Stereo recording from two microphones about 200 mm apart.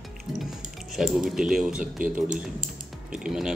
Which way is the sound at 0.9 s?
Centre (ahead or behind).